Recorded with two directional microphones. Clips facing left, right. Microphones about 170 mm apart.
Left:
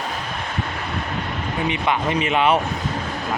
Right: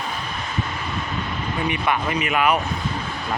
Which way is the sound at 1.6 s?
20° left (ahead or behind).